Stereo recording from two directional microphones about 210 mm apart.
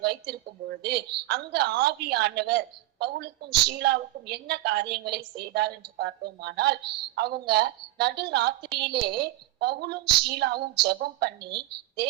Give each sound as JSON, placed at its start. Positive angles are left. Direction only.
{"t": 0.0, "sound": "a woman's voice", "side_deg": -50}